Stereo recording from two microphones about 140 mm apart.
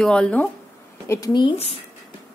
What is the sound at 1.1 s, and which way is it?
Speech, 30° left (ahead or behind).